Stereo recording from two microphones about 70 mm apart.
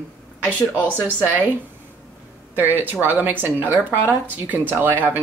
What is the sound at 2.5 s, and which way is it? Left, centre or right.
Speech, right.